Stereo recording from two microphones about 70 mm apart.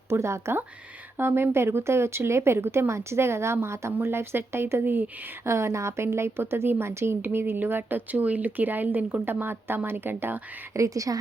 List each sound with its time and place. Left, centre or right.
0.1 s a woman's voice: right
5.5 s a woman's voice: right
10.8 s speech: right